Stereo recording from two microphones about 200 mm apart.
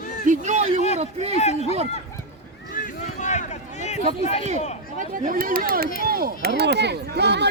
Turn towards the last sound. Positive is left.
turn(degrees=-55)  # may be behind; listen again after turning